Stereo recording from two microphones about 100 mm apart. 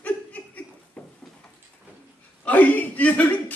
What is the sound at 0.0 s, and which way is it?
Laughter, 15° left (ahead or behind).